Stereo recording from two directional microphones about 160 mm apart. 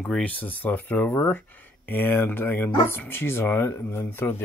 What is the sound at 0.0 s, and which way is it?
Speech, 5° left (ahead or behind).